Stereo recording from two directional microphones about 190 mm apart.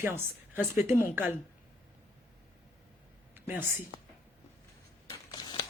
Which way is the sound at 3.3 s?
10° right (ahead or behind).